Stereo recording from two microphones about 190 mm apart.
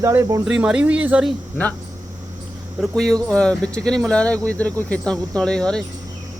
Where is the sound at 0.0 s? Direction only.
15° right (ahead or behind).